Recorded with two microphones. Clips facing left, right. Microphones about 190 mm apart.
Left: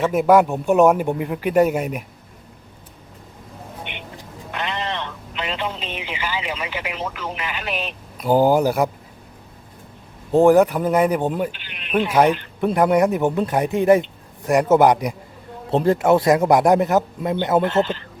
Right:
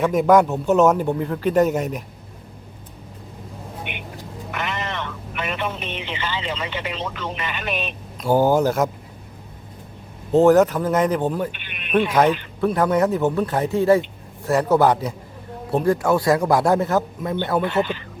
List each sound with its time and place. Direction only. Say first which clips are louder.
0.0 s a man's voice: even; 5° left (ahead or behind)
4.5 s a sound: left 2 dB; 15° left (ahead or behind)
6.0 s a man's voice: left 2 dB; 10° left (ahead or behind)
10.3 s a man's voice: left 1 dB; 15° left (ahead or behind)